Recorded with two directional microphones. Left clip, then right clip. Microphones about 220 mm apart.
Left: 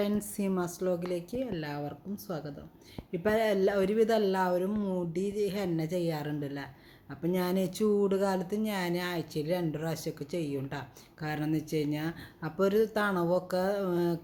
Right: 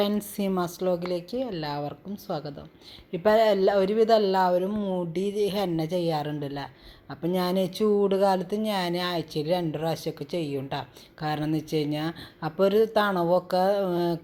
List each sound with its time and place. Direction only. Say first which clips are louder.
0.3 s speech: right 5 dB; 5° right (ahead or behind)
5.1 s a woman's voice: right 5 dB; 20° left (ahead or behind)
5.5 s speech: right 6 dB; 5° right (ahead or behind)